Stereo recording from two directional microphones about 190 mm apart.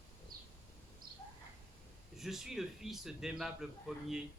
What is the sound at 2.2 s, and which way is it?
A man's voice, centre (ahead or behind).